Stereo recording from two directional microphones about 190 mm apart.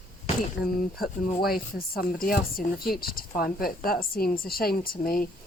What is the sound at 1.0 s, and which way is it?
Speech, 50° left (ahead or behind).